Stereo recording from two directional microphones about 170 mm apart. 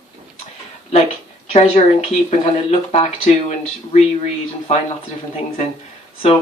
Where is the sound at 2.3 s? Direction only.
40° left (ahead or behind).